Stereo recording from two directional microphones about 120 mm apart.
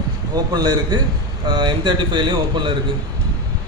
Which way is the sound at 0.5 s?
35° right (ahead or behind).